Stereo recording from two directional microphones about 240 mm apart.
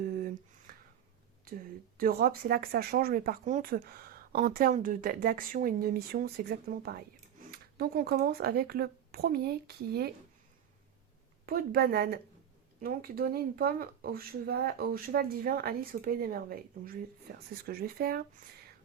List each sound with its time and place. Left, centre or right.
0.0 s a sound: right
2.0 s speech: right
11.4 s speech: right